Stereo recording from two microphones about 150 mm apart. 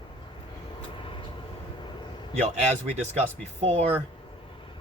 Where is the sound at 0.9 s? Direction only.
35° left (ahead or behind).